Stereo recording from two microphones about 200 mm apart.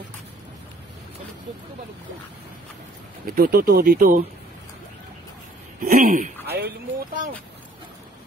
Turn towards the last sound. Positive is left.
turn(degrees=-50)  # may be behind; listen again after turning